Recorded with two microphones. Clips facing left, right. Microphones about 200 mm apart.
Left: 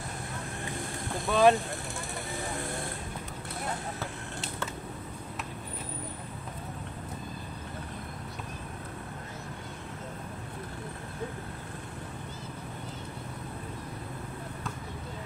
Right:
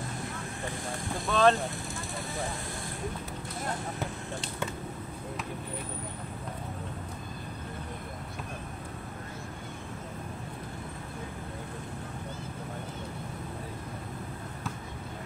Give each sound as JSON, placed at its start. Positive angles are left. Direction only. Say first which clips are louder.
{"t": 1.3, "sound": "speech", "louder": "left 2 dB", "side_deg": 10}